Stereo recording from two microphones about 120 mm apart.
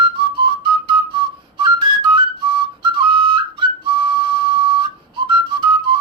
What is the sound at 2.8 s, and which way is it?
Whistle, 40° right (ahead or behind).